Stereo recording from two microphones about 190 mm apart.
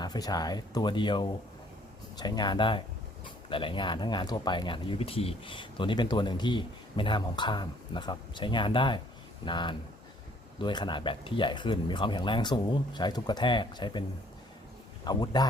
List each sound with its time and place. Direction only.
0.0 s speech: 20° left (ahead or behind)
15.0 s speech: 20° left (ahead or behind)